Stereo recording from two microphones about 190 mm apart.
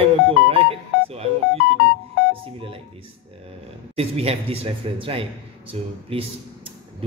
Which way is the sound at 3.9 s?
30° right (ahead or behind).